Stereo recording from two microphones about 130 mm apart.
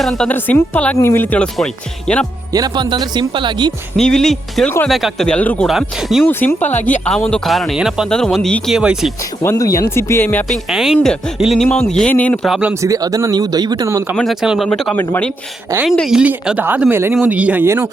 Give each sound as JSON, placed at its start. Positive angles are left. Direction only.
{"t": 0.0, "sound": "speech", "side_deg": 0}
{"t": 0.3, "sound": "speech", "side_deg": 15}
{"t": 2.5, "sound": "speech", "side_deg": -35}
{"t": 3.9, "sound": "speech", "side_deg": 5}
{"t": 5.6, "sound": "speech", "side_deg": 0}
{"t": 6.2, "sound": "speech", "side_deg": 15}
{"t": 9.4, "sound": "speech", "side_deg": 25}
{"t": 10.5, "sound": "speech", "side_deg": -5}
{"t": 12.5, "sound": "speech", "side_deg": -5}
{"t": 12.8, "sound": "speech", "side_deg": -25}
{"t": 14.4, "sound": "speech", "side_deg": 0}
{"t": 14.9, "sound": "speech", "side_deg": 15}
{"t": 15.9, "sound": "speech", "side_deg": -5}